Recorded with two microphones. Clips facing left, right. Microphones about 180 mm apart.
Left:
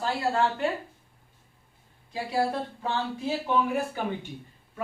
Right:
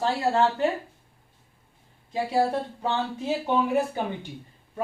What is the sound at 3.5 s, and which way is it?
Speech, 25° right (ahead or behind).